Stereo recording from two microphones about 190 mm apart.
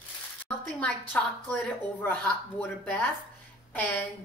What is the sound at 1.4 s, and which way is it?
Speech, 10° left (ahead or behind).